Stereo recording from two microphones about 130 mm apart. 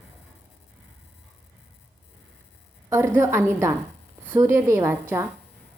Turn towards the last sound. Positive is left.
turn(degrees=-15)  # may be behind; listen again after turning